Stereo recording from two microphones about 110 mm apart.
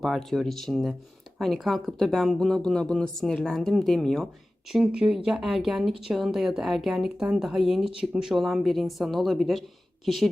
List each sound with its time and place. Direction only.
0.0 s speech: centre (ahead or behind)
4.7 s speech: 5° right (ahead or behind)